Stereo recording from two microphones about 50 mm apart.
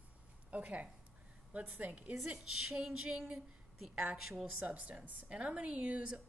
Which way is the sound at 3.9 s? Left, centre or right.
Right.